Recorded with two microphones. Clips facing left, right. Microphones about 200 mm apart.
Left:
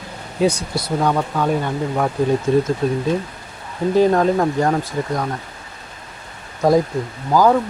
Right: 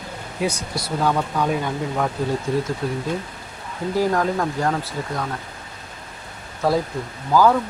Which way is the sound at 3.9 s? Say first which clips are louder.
Left 6 dB; 20° left (ahead or behind).